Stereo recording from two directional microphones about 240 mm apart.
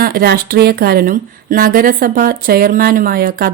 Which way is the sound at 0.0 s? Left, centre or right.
Right.